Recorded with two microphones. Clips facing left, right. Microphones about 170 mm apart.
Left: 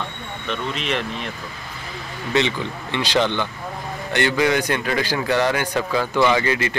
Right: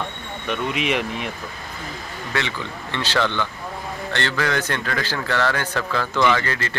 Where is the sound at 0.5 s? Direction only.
10° right (ahead or behind).